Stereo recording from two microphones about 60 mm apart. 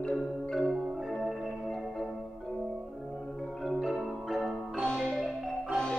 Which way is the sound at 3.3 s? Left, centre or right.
Centre.